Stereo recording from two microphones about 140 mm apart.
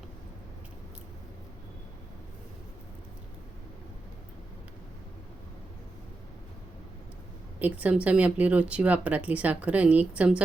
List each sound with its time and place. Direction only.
7.6 s speech: 10° right (ahead or behind)